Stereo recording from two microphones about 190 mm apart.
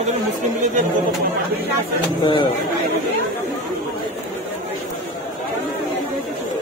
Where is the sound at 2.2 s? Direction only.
25° left (ahead or behind).